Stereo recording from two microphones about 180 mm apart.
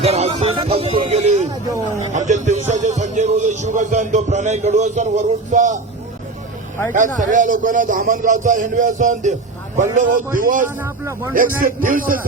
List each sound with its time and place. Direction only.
0.0 s speech: 35° right (ahead or behind)
6.9 s a man's voice: 45° right (ahead or behind)
10.8 s a man's voice: 15° right (ahead or behind)
11.3 s a man's voice: 50° right (ahead or behind)